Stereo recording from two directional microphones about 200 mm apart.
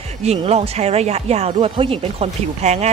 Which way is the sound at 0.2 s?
30° right (ahead or behind).